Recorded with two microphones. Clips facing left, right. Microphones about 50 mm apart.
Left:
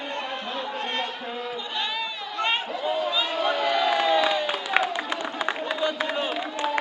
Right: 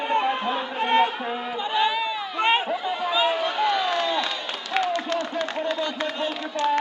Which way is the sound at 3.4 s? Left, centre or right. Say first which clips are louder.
Even; centre.